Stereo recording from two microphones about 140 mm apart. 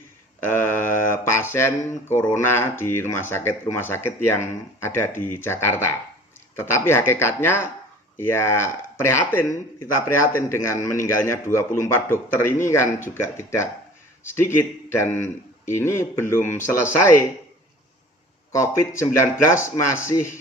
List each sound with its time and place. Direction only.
0.3 s mantra: 15° left (ahead or behind)
1.1 s a sound: 15° left (ahead or behind)
2.1 s a man's voice: 15° left (ahead or behind)
18.5 s a man's voice: 20° left (ahead or behind)